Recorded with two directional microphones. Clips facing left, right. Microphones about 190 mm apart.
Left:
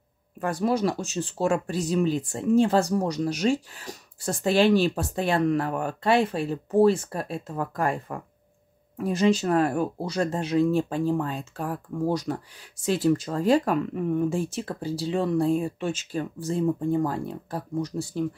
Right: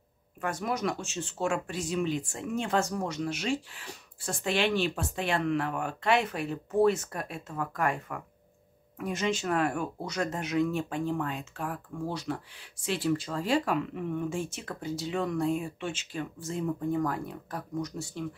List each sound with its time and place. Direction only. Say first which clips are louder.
0.4 s speech: left 7 dB; 35° left (ahead or behind)